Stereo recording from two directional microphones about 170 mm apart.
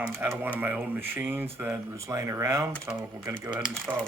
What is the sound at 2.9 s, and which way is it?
Speech, 5° right (ahead or behind).